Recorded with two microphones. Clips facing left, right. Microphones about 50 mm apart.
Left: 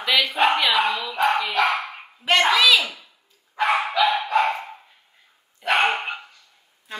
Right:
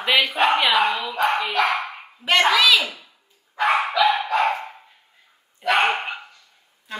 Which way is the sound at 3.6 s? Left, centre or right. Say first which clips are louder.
Right 1 dB; right.